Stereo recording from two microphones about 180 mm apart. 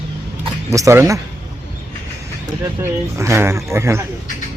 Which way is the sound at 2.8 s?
15° right (ahead or behind).